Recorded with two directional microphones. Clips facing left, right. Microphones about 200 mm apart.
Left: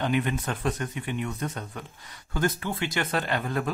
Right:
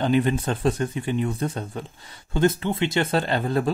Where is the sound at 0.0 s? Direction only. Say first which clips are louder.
Right 6 dB; 30° right (ahead or behind).